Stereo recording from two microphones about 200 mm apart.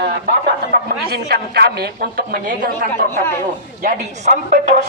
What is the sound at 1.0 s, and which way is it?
A woman's voice, 50° right (ahead or behind).